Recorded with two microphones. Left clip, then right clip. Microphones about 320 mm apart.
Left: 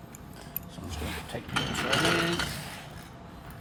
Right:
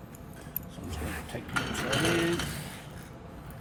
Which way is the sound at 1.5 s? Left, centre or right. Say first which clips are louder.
Left 2 dB; centre.